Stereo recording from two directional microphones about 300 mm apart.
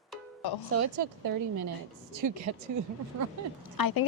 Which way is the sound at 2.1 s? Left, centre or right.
Right.